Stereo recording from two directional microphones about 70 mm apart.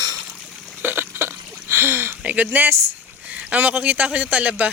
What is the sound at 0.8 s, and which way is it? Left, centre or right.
Burping, right.